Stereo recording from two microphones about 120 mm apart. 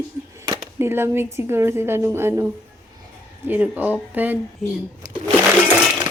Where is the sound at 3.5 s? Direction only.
15° right (ahead or behind).